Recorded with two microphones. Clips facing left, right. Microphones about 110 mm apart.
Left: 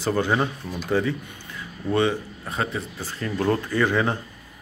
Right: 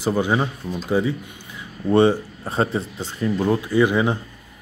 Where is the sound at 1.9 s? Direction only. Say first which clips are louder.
Right 6 dB; 30° right (ahead or behind).